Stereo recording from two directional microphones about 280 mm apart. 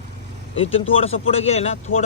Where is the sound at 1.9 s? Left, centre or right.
Left.